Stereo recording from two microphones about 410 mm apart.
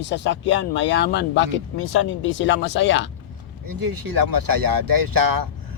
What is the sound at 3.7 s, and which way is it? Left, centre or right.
Speech, right.